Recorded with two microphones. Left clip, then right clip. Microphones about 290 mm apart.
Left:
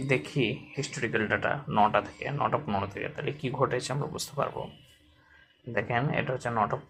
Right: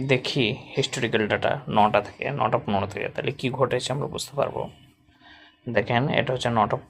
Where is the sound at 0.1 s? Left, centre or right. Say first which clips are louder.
Right 5 dB; right.